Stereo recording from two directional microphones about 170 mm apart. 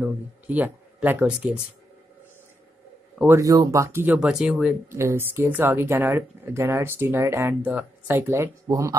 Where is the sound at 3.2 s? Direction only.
15° right (ahead or behind).